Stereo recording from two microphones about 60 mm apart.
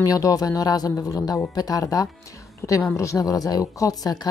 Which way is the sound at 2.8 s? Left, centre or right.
Left.